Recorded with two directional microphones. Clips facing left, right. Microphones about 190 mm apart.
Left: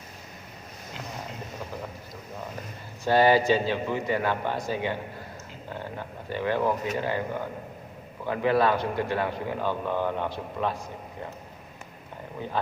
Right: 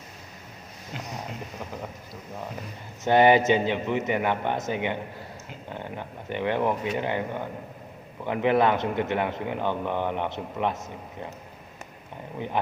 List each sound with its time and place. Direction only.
3.0 s a man's voice: 20° right (ahead or behind)
6.2 s a man's voice: 20° right (ahead or behind)
8.3 s a man's voice: 20° right (ahead or behind)